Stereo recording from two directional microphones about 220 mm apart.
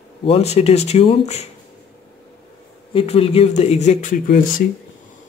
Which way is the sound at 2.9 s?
25° left (ahead or behind).